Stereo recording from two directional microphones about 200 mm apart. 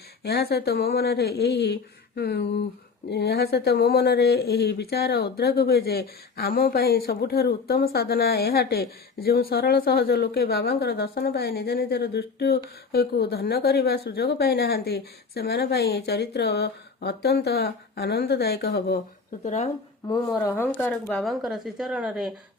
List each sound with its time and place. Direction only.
0.2 s speech: 55° left (ahead or behind)
19.5 s speech: 35° left (ahead or behind)
20.1 s speech: 15° left (ahead or behind); by 22.3 s centre (ahead or behind)